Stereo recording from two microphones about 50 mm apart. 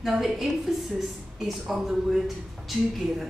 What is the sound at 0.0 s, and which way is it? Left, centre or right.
A woman's voice, centre.